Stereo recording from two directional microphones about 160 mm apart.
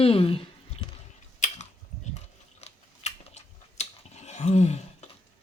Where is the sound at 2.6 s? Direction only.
45° left (ahead or behind).